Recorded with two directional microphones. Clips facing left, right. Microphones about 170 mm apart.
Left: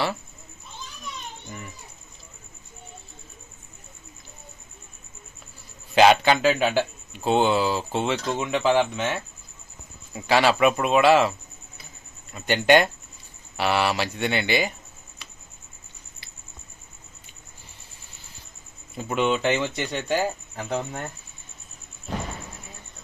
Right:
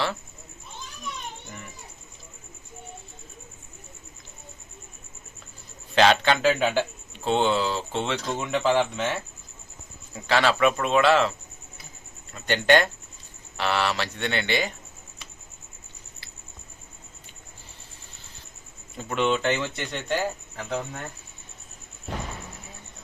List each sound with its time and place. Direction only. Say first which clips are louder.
5.9 s speech: left 3 dB; 10° left (ahead or behind)
10.2 s speech: left 2 dB; 10° left (ahead or behind)
18.9 s speech: left 1 dB; 10° left (ahead or behind)